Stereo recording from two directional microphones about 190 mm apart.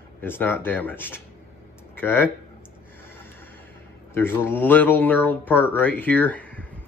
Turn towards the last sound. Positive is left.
turn(degrees=10)  # may be behind; listen again after turning